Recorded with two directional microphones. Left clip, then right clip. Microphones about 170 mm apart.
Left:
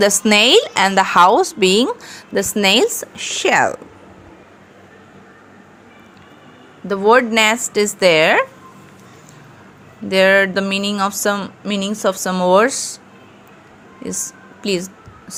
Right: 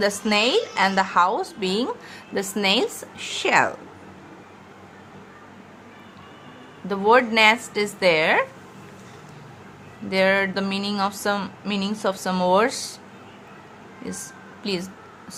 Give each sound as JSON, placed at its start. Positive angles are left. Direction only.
{"t": 0.0, "sound": "a woman's voice", "side_deg": 45}
{"t": 6.8, "sound": "speech", "side_deg": 30}
{"t": 10.1, "sound": "speech", "side_deg": 35}
{"t": 11.3, "sound": "speech", "side_deg": 20}
{"t": 14.0, "sound": "a woman's voice", "side_deg": 30}